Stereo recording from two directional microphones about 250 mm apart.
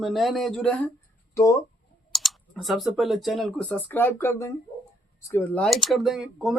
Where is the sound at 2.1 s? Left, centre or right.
Centre.